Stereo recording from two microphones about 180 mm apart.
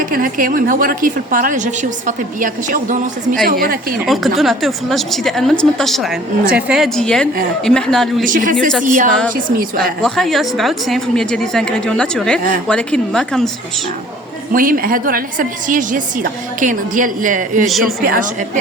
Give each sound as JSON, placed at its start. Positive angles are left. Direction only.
{"t": 0.0, "sound": "a woman's voice", "side_deg": -50}
{"t": 4.0, "sound": "a woman's voice", "side_deg": 0}
{"t": 8.2, "sound": "a woman's voice", "side_deg": -50}
{"t": 10.0, "sound": "a woman's voice", "side_deg": 0}
{"t": 14.5, "sound": "a woman's voice", "side_deg": -50}
{"t": 17.7, "sound": "a woman's voice", "side_deg": 0}
{"t": 18.0, "sound": "a woman's voice", "side_deg": -50}